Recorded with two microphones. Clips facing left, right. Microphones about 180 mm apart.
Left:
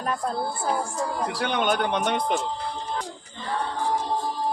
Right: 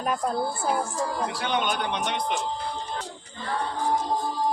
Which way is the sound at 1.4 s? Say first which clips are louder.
Left 5 dB; 55° left (ahead or behind).